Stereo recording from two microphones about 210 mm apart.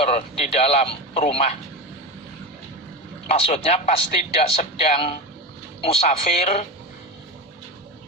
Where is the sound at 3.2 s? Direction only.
30° left (ahead or behind).